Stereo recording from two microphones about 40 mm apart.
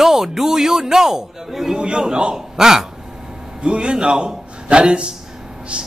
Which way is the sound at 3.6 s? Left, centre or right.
Right.